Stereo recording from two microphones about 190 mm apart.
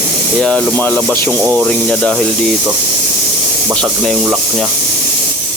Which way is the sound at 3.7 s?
Centre (ahead or behind).